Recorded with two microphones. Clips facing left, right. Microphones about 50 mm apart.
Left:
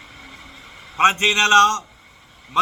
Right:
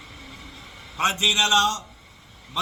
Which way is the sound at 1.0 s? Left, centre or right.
Left.